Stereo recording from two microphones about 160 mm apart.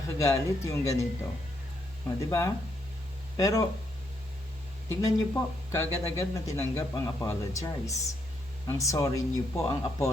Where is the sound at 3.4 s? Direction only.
20° left (ahead or behind).